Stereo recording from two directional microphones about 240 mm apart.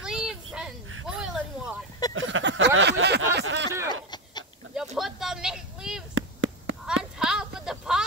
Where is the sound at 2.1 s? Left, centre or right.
Right.